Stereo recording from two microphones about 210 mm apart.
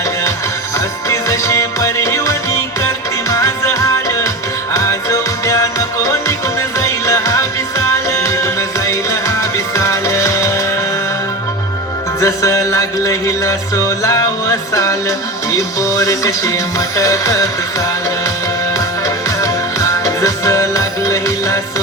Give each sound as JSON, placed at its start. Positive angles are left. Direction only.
{"t": 1.1, "sound": "music", "side_deg": 15}
{"t": 12.2, "sound": "music", "side_deg": 15}
{"t": 14.7, "sound": "music", "side_deg": 15}
{"t": 19.0, "sound": "music", "side_deg": 15}